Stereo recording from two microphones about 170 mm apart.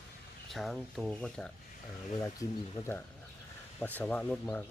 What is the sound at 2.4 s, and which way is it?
Speech, 20° left (ahead or behind).